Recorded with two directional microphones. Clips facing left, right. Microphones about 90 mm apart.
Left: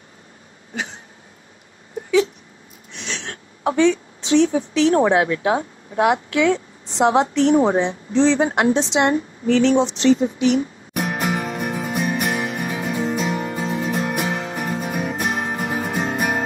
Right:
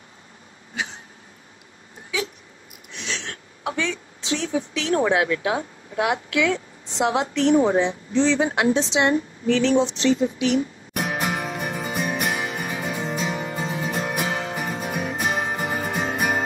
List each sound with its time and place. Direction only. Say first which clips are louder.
3.1 s a woman's voice: left 1 dB; 35° left (ahead or behind)
10.9 s music: left 3 dB; centre (ahead or behind)